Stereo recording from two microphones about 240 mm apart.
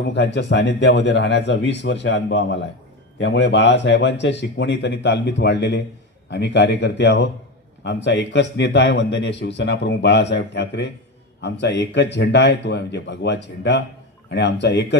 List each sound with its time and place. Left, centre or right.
0.1 s a man's voice: left